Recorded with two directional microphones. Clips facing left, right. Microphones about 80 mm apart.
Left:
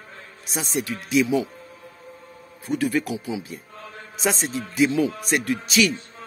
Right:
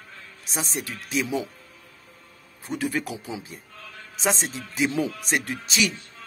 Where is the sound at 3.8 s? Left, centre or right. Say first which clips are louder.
Left 4 dB; left.